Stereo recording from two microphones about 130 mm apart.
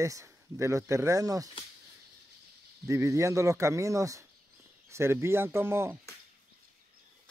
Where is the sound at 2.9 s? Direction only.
25° right (ahead or behind).